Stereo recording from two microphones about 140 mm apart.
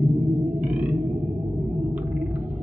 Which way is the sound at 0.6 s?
10° right (ahead or behind).